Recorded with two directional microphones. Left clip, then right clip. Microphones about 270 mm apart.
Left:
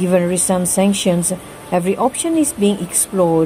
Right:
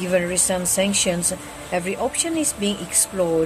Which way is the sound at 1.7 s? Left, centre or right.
Centre.